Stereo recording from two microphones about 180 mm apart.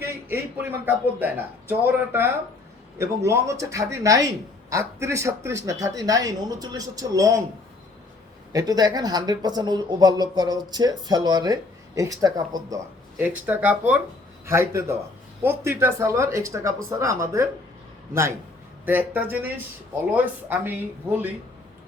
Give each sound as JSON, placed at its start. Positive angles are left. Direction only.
{"t": 0.0, "sound": "speech", "side_deg": -10}
{"t": 8.5, "sound": "speech", "side_deg": -20}
{"t": 13.1, "sound": "speech", "side_deg": -10}